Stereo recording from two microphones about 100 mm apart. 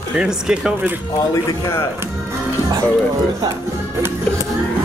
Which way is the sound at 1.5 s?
35° left (ahead or behind).